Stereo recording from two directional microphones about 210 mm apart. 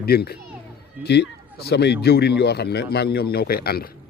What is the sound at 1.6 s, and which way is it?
A man's voice, 50° left (ahead or behind).